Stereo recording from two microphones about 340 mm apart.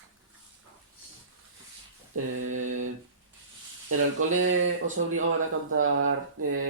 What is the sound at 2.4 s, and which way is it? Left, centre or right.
Speech, right.